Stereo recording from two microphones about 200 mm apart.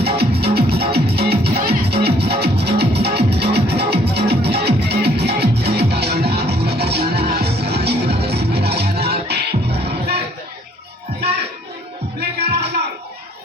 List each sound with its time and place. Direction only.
0.0 s music: 55° right (ahead or behind)
12.2 s music: 55° right (ahead or behind)